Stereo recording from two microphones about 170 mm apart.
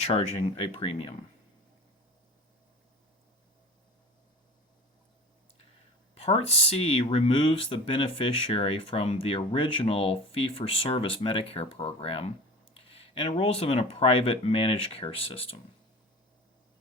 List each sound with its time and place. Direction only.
0.0 s speech: 35° left (ahead or behind)
6.1 s speech: 35° left (ahead or behind)